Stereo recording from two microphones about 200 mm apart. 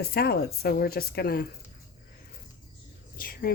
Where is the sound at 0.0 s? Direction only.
50° left (ahead or behind).